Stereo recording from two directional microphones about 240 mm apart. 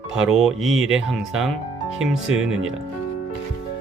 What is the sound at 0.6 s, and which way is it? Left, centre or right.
Speech, right.